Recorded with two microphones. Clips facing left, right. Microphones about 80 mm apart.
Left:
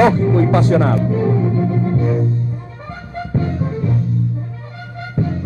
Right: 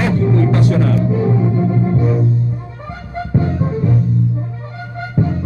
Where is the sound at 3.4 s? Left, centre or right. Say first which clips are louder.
Right 2 dB; centre.